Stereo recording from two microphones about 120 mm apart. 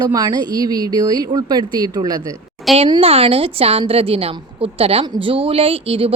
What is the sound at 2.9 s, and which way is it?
A woman's voice, 55° right (ahead or behind).